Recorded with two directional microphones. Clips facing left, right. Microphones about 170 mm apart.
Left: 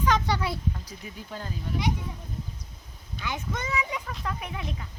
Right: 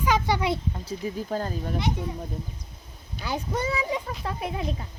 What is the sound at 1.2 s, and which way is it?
Speech, 45° right (ahead or behind).